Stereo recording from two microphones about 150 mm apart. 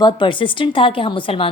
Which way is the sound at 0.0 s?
30° left (ahead or behind).